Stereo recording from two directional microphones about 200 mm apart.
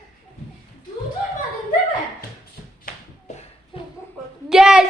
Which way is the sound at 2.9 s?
45° left (ahead or behind).